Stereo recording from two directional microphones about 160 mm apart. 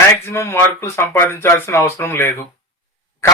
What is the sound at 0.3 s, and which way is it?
A man's voice, 15° left (ahead or behind).